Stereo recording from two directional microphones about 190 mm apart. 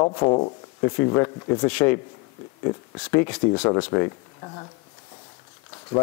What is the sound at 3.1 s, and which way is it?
A man's voice, 15° left (ahead or behind).